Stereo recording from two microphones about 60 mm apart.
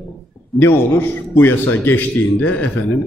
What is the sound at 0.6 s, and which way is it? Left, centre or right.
A man's voice, left.